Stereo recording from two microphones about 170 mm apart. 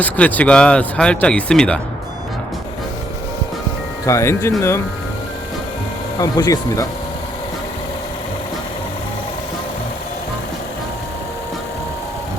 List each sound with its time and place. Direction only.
0.0 s speech: 10° left (ahead or behind)
4.0 s speech: 15° left (ahead or behind)
6.1 s speech: 20° left (ahead or behind)